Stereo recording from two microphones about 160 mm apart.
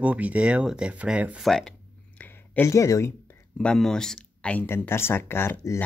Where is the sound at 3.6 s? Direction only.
5° left (ahead or behind).